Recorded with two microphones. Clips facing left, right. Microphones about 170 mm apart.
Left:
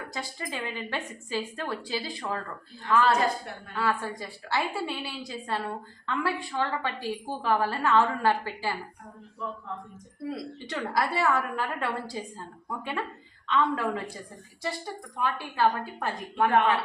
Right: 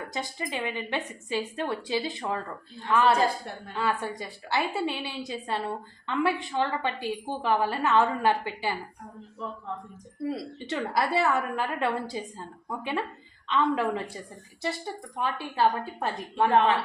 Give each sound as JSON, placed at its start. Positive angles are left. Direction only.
{"t": 0.1, "sound": "a woman's voice", "side_deg": -20}
{"t": 10.2, "sound": "a woman's voice", "side_deg": -25}
{"t": 15.2, "sound": "a woman's voice", "side_deg": -25}